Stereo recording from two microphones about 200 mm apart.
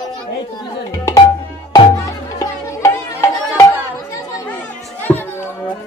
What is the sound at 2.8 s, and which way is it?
Music, 15° left (ahead or behind).